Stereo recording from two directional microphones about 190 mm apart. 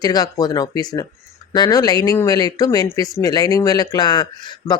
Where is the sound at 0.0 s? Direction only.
20° left (ahead or behind).